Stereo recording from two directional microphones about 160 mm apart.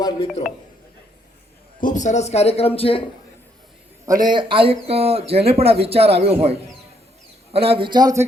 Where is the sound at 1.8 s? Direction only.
50° left (ahead or behind).